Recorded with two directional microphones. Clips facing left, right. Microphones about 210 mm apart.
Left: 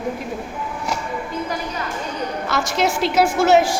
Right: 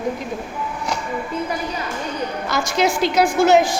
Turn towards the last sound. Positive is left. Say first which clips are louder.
# right 1 dB
turn(degrees=5)  # may be behind; listen again after turning